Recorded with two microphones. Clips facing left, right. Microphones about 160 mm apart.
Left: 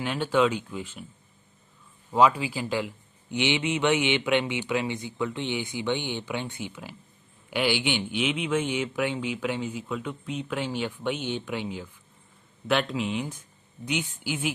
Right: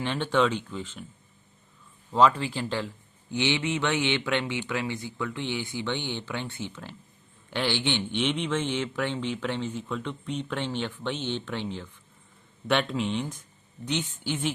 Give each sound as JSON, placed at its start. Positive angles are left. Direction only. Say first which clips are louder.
{"t": 0.0, "sound": "speech", "louder": "left 1 dB", "side_deg": 10}
{"t": 2.1, "sound": "speech", "louder": "even", "side_deg": 10}